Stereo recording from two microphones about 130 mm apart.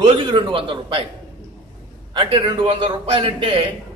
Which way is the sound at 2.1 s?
40° right (ahead or behind).